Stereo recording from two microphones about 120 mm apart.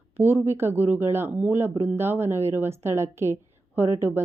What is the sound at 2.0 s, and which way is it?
Speech, 20° right (ahead or behind).